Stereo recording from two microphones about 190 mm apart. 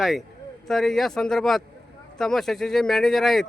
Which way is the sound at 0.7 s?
Centre (ahead or behind).